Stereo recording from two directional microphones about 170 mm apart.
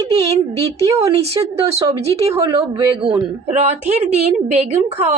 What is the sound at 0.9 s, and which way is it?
Speech, 20° right (ahead or behind).